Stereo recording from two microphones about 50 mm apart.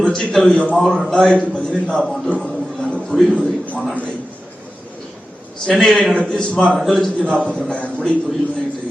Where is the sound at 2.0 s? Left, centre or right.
Centre.